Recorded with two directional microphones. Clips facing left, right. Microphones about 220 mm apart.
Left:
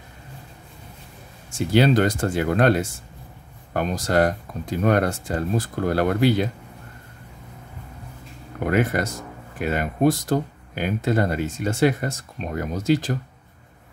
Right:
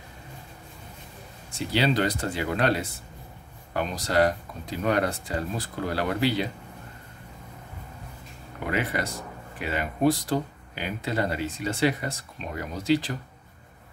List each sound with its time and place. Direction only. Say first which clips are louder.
1.5 s speech: left 7 dB; 50° left (ahead or behind)
8.6 s speech: left 7 dB; 45° left (ahead or behind)